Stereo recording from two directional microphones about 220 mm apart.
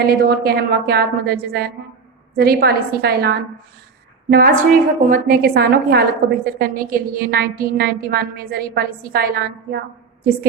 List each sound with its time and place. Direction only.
0.0 s a woman's voice: 45° right (ahead or behind)
4.7 s a woman's voice: centre (ahead or behind)
4.9 s a woman's voice: 35° right (ahead or behind)